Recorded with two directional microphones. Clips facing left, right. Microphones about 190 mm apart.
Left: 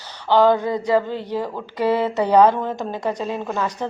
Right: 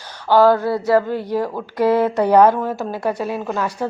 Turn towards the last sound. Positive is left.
turn(degrees=-5)  # may be behind; listen again after turning